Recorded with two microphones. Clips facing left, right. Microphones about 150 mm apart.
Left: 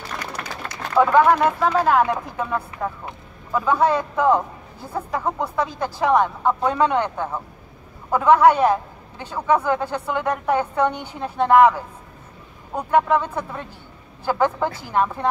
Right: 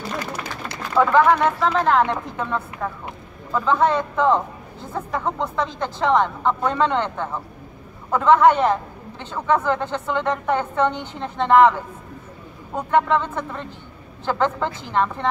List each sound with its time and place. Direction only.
0.2 s run: 25° right (ahead or behind)
0.9 s a woman's voice: 10° left (ahead or behind)